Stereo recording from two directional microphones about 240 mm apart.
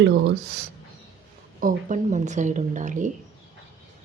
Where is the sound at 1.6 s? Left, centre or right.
Right.